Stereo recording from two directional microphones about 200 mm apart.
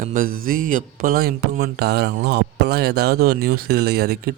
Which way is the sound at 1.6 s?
55° right (ahead or behind).